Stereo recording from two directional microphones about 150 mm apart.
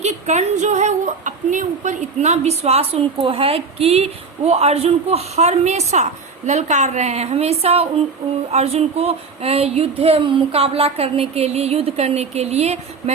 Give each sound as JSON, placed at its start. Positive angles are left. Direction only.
{"t": 0.0, "sound": "a woman's voice", "side_deg": -50}